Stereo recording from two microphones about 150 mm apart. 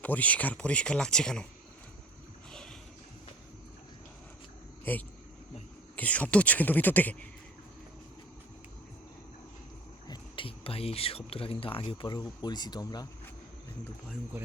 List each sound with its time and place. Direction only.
0.0 s speech: 10° left (ahead or behind)
4.9 s speech: 15° left (ahead or behind)
10.1 s speech: 35° left (ahead or behind)